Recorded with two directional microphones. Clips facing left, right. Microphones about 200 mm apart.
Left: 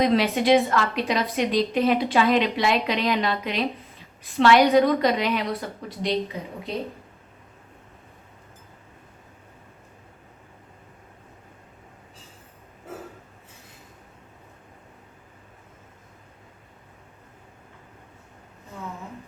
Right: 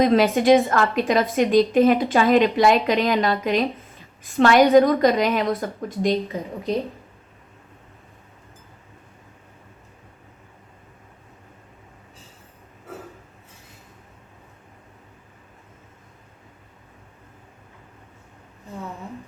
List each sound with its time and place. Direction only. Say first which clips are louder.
0.0 s a woman's voice: right 4 dB; 50° right (ahead or behind)